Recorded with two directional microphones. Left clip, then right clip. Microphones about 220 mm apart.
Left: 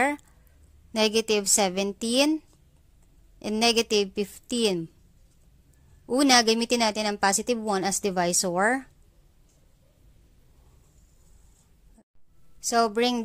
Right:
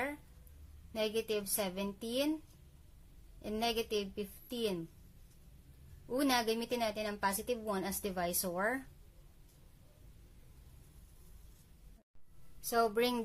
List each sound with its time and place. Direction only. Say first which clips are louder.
0.9 s a woman's voice: left 12 dB; 45° left (ahead or behind)
3.4 s a woman's voice: left 12 dB; 50° left (ahead or behind)
6.0 s a woman's voice: left 13 dB; 45° left (ahead or behind)
12.6 s a woman's voice: left 9 dB; 35° left (ahead or behind)